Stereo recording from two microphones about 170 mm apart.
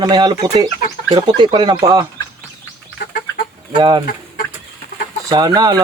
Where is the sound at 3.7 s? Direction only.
25° right (ahead or behind).